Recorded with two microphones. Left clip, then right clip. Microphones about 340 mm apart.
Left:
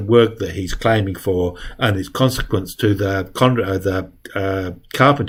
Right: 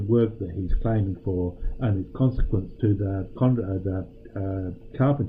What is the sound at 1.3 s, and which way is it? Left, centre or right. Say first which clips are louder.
Speech: left 10 dB; left.